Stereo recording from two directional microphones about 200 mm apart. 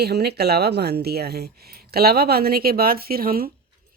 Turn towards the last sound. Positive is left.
turn(degrees=-50)  # may be behind; listen again after turning